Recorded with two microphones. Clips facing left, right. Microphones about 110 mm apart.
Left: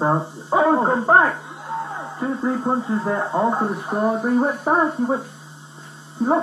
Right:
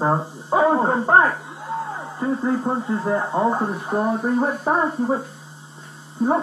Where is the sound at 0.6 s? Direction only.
30° left (ahead or behind).